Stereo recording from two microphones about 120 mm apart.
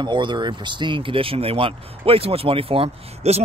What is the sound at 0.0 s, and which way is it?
Speech, 40° right (ahead or behind).